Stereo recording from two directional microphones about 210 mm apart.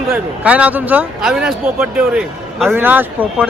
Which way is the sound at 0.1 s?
5° right (ahead or behind).